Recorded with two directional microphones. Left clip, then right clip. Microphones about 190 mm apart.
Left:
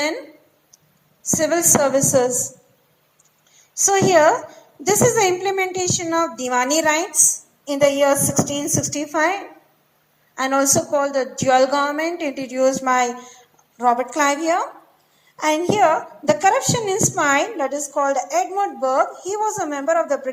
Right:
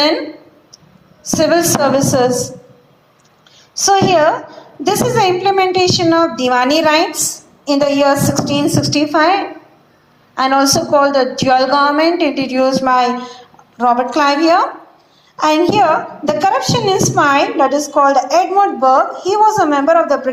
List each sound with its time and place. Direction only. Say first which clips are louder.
1.4 s a woman's voice: right 5 dB; 55° left (ahead or behind)
3.8 s a woman's voice: right 4 dB; 50° left (ahead or behind)